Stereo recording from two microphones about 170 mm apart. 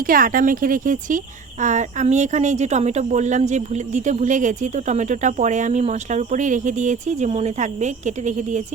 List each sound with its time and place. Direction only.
0.0 s speech: 55° right (ahead or behind)